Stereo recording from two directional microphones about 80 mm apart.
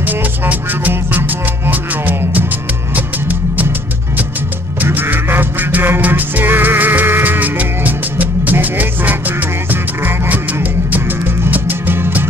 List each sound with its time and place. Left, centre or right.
0.5 s music: centre
4.8 s music: right